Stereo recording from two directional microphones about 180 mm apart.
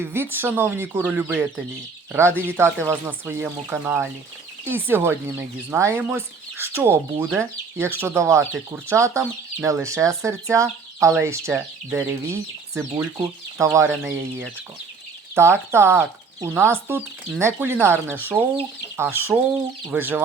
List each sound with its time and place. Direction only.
0.0 s speech: 10° right (ahead or behind)
15.4 s speech: 15° right (ahead or behind)